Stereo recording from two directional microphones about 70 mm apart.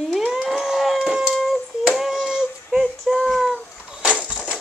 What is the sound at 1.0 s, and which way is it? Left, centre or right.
Howl, centre.